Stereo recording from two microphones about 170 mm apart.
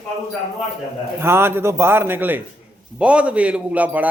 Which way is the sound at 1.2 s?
15° right (ahead or behind).